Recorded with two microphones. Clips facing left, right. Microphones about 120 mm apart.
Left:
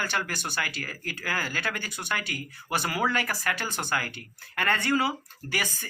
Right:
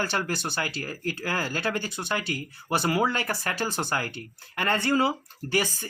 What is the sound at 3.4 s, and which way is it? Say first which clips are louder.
Speech: right 2 dB; 30° right (ahead or behind).